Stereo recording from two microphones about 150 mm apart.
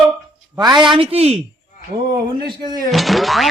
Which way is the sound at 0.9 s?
40° right (ahead or behind).